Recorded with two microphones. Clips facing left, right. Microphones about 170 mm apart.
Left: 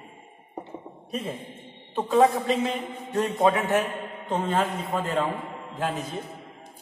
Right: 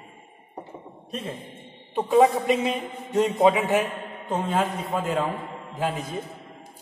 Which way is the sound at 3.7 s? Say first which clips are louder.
Right 1 dB; 10° right (ahead or behind).